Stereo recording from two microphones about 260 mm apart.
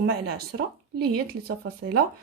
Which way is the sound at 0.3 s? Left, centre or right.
Right.